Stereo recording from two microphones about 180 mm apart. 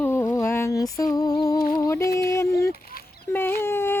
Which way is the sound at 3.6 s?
15° left (ahead or behind).